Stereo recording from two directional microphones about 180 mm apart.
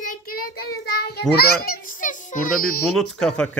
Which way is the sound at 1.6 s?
50° left (ahead or behind).